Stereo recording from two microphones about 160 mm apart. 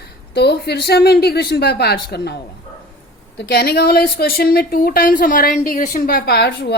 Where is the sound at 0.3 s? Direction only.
90° left.